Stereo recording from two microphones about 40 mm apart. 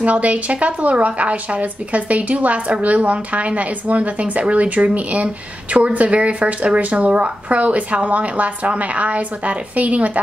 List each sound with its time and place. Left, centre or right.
0.0 s a woman's voice: right